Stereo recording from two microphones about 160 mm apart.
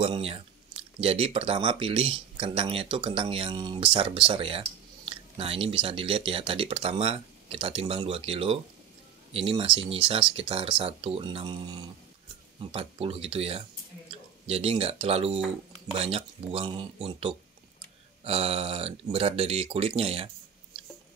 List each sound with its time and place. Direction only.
0.0 s speech: 35° right (ahead or behind)